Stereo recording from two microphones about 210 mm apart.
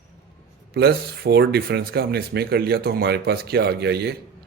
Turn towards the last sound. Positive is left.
turn(degrees=-50)  # may be behind; listen again after turning